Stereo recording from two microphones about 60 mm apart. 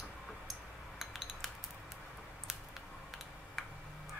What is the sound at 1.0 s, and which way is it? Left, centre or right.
Cutlery, centre.